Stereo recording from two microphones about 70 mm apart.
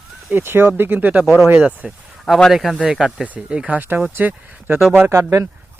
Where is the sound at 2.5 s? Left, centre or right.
Centre.